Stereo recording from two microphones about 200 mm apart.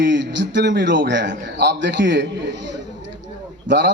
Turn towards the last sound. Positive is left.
turn(degrees=-60)  # may be behind; listen again after turning